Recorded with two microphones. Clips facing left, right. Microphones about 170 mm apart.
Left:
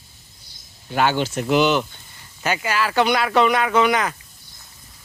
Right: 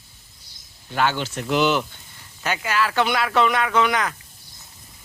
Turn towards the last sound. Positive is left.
turn(degrees=0)  # may be behind; listen again after turning